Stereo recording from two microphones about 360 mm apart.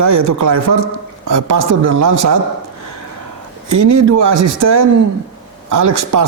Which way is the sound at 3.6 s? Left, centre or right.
Right.